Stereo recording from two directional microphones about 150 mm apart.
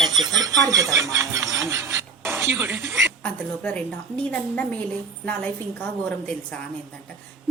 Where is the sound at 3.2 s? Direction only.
10° left (ahead or behind).